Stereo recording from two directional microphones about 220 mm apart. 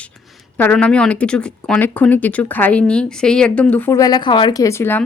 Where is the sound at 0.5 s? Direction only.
5° left (ahead or behind).